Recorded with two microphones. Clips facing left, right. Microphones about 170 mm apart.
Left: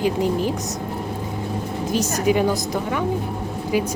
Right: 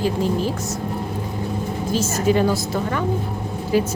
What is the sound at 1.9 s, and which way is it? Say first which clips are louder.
A woman's voice: even; 15° left (ahead or behind).